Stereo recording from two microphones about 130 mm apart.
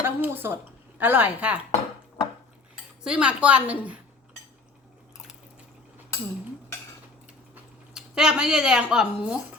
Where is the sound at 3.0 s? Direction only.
5° right (ahead or behind).